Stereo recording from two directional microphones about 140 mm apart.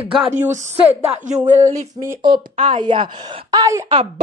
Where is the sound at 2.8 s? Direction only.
35° right (ahead or behind).